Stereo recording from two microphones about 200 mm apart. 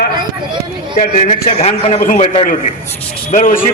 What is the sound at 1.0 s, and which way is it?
A man's voice, 35° left (ahead or behind).